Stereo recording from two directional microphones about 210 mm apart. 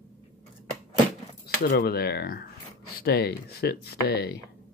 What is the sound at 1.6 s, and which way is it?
Speech, 45° left (ahead or behind).